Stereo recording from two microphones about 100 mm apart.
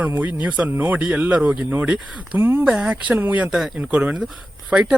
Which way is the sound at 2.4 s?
25° right (ahead or behind).